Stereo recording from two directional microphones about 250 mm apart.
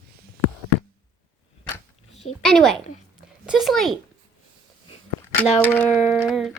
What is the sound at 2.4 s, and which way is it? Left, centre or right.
Speech, centre.